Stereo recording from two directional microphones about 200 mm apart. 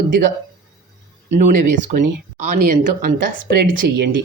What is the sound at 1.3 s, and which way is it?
Speech, 40° right (ahead or behind).